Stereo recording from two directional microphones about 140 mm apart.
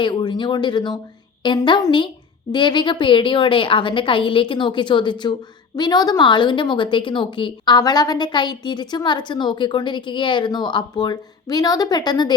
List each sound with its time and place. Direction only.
0.0 s a woman's voice: 35° left (ahead or behind)